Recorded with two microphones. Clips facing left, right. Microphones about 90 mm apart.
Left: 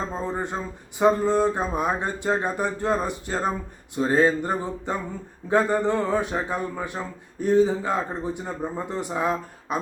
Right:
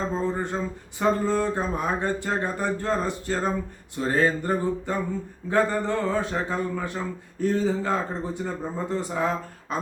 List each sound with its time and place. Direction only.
0.1 s speech: 15° left (ahead or behind)
3.9 s a sound: 20° left (ahead or behind)
5.5 s speech: 20° left (ahead or behind)